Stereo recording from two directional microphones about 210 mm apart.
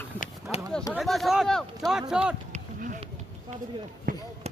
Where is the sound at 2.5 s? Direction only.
35° right (ahead or behind).